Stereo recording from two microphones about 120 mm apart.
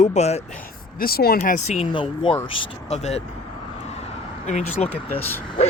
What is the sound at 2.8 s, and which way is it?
Speech, 65° left (ahead or behind).